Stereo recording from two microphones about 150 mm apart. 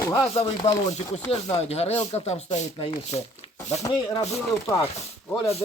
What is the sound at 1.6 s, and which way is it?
Speech, 45° left (ahead or behind).